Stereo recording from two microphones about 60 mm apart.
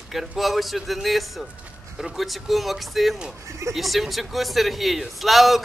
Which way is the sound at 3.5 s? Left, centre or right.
Right.